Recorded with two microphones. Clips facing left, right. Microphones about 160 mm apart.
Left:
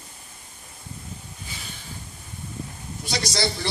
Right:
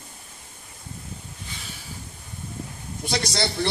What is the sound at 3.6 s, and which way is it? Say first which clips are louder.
Speech: right 5 dB; 55° right (ahead or behind).